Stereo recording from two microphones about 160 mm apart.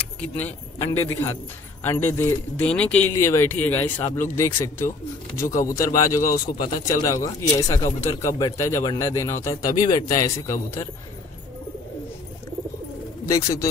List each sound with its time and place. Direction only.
0.2 s speech: 15° left (ahead or behind)
13.3 s speech: 20° left (ahead or behind)